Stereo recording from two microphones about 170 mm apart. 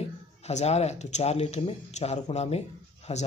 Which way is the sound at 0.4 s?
40° left (ahead or behind).